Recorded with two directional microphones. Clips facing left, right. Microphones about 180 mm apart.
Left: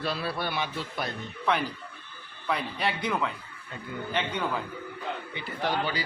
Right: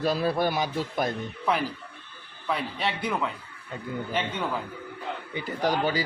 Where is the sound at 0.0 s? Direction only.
45° right (ahead or behind).